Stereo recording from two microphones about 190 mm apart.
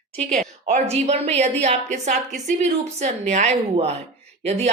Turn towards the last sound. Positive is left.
turn(degrees=-30)  # may be behind; listen again after turning